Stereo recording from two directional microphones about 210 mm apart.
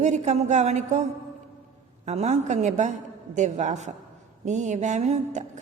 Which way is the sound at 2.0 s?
30° right (ahead or behind).